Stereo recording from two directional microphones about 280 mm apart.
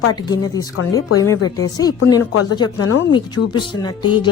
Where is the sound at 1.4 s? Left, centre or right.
Left.